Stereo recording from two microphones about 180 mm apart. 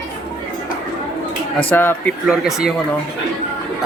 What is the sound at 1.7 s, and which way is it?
Speech, 10° left (ahead or behind).